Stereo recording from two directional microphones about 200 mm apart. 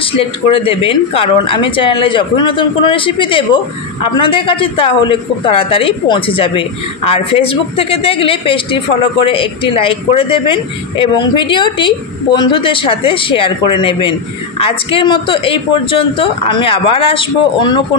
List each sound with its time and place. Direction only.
0.0 s speech: 25° left (ahead or behind)